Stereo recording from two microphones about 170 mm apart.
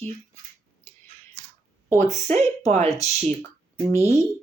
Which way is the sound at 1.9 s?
15° left (ahead or behind).